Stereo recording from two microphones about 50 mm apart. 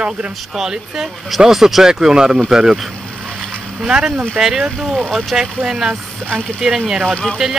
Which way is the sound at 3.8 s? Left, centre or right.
Centre.